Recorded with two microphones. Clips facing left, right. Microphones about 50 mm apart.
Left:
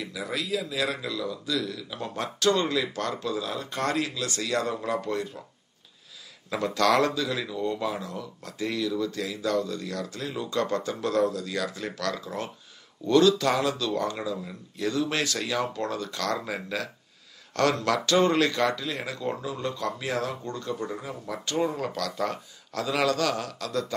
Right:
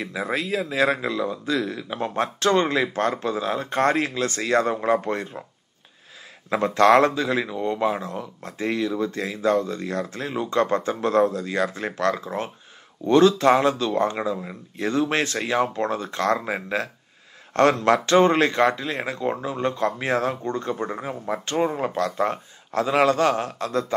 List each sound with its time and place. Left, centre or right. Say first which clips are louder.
0.0 s speech: right 6 dB; right
6.5 s speech: right 7 dB; right